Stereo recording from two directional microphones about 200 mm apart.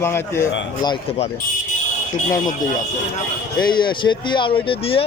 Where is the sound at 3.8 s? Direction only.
25° left (ahead or behind).